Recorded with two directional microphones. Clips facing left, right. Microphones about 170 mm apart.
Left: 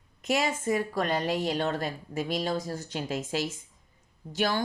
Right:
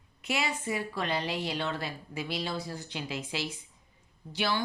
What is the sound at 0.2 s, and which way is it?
A woman's voice, 45° left (ahead or behind).